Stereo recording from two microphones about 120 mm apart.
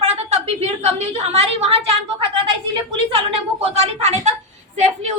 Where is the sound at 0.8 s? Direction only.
60° right (ahead or behind).